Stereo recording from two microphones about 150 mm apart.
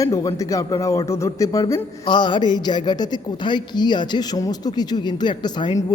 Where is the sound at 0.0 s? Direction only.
20° left (ahead or behind).